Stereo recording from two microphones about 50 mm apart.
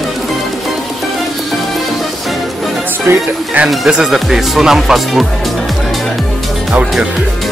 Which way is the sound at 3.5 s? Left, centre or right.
Right.